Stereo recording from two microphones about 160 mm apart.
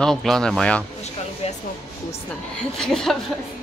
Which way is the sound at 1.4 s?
40° left (ahead or behind).